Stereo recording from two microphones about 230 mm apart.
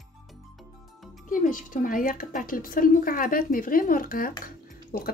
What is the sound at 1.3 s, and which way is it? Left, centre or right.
Speech, left.